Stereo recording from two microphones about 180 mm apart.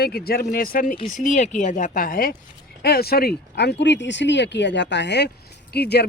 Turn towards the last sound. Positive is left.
turn(degrees=65)  # may be behind; listen again after turning